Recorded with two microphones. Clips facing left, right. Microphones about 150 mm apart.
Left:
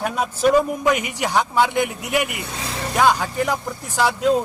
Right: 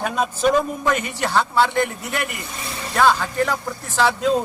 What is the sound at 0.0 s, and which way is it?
A man's voice, 5° left (ahead or behind).